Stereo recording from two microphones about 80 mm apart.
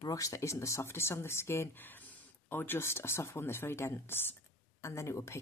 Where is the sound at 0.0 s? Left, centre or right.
Left.